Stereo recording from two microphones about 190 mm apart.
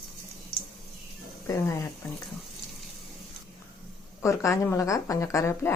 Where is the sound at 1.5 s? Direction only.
15° left (ahead or behind).